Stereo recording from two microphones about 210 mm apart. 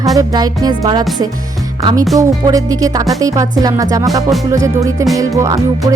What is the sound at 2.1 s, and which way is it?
Music, 15° right (ahead or behind).